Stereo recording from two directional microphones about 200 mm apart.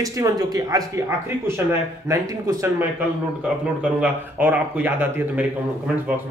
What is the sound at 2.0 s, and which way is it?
Speech, 15° right (ahead or behind).